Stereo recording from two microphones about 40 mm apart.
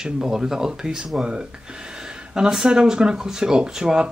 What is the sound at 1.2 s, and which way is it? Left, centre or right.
Speech, right.